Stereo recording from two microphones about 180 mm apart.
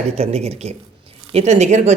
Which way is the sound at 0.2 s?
35° right (ahead or behind).